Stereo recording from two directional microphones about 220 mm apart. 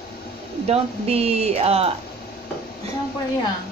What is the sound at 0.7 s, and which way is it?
Speech, 25° right (ahead or behind).